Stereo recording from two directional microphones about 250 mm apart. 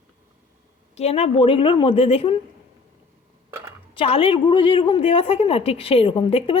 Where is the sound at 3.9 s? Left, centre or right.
Left.